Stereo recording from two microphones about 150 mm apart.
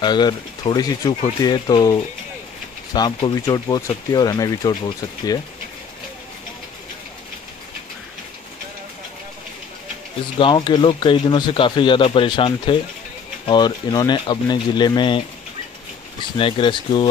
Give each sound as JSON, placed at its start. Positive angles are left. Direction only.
{"t": 0.0, "sound": "speech", "side_deg": 30}
{"t": 10.4, "sound": "speech", "side_deg": 30}